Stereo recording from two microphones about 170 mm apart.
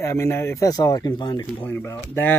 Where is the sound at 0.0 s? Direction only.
15° left (ahead or behind).